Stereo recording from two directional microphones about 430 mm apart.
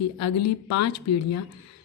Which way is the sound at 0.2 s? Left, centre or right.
Left.